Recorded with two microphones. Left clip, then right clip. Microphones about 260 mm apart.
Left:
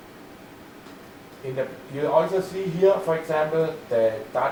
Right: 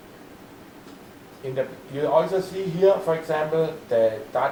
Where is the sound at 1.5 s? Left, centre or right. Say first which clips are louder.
Right 1 dB; centre.